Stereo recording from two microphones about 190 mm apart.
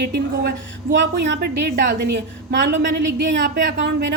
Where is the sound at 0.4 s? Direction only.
75° right (ahead or behind).